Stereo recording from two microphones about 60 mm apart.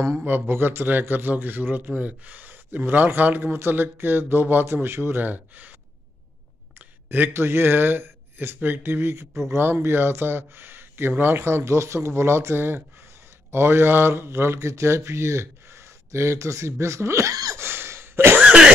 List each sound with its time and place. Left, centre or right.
0.2 s a man's voice: right
5.2 s a man's voice: right
7.3 s a man's voice: right
17.3 s a sound: right
17.6 s throat clearing: right
18.4 s cough: centre